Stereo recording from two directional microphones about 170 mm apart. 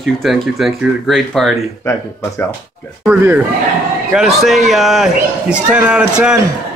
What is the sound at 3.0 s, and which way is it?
A man's voice, 10° right (ahead or behind).